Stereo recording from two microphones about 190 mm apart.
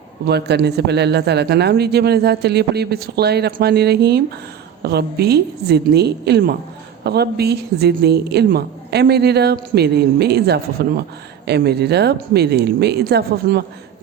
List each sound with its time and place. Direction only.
0.3 s speech: 60° right (ahead or behind)